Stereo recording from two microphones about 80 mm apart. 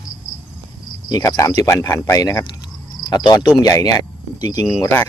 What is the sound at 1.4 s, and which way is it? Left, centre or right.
Cricket, left.